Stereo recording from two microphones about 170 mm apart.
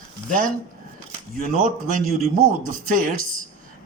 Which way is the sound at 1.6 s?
50° right (ahead or behind).